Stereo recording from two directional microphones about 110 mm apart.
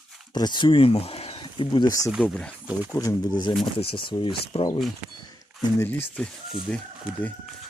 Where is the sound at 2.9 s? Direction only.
30° left (ahead or behind).